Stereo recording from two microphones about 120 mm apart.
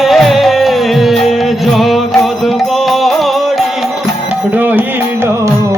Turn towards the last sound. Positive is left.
turn(degrees=-15)  # may be behind; listen again after turning